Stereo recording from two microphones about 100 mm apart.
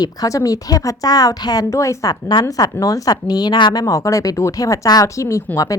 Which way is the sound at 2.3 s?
40° left (ahead or behind).